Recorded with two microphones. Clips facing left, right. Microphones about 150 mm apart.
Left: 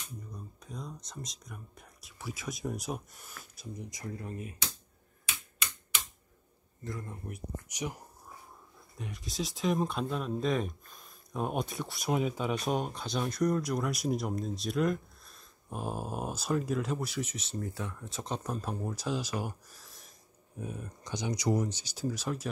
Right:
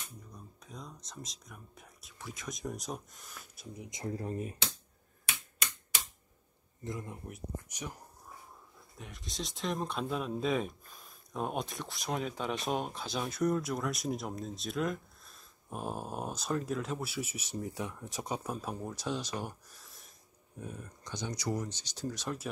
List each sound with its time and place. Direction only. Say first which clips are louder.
0.3 s speech: left 4 dB; centre (ahead or behind)
3.9 s speech: right 7 dB; 30° right (ahead or behind)
6.8 s speech: even; 20° right (ahead or behind)
7.6 s speech: left 6 dB; 10° left (ahead or behind)
8.9 s speech: left 5 dB; centre (ahead or behind)